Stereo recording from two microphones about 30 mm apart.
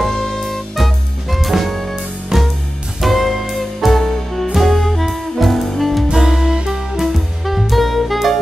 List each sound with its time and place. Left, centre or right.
0.0 s music: centre
2.3 s music: right
3.0 s music: centre
6.1 s music: centre
7.5 s music: centre